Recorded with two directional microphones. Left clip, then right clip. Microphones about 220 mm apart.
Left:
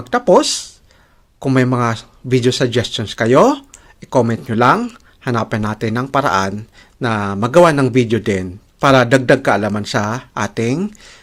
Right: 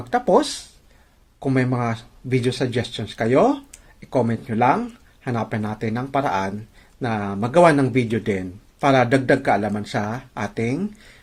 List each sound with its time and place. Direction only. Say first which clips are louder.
0.1 s speech: left 6 dB; 30° left (ahead or behind)